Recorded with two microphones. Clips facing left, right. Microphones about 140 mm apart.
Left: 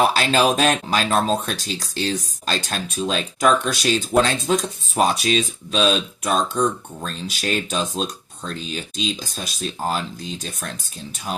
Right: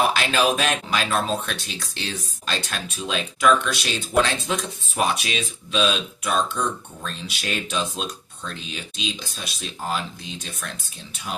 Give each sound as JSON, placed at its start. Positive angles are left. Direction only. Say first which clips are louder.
{"t": 0.1, "sound": "speech", "louder": "left 3 dB", "side_deg": 35}